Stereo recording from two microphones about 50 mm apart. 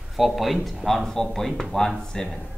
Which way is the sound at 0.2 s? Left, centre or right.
Centre.